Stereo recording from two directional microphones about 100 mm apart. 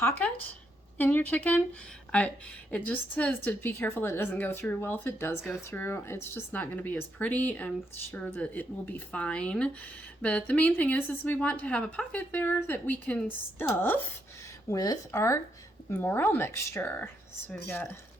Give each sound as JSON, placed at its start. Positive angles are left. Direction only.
{"t": 0.0, "sound": "a woman's voice", "side_deg": 20}
{"t": 14.7, "sound": "a woman's voice", "side_deg": 35}